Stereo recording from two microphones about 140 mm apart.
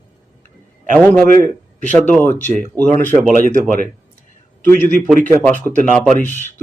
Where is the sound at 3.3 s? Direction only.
85° right.